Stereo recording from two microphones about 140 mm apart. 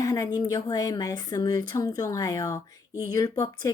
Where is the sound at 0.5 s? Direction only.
25° left (ahead or behind).